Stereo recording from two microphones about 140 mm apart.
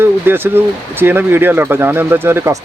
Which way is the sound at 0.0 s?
15° right (ahead or behind).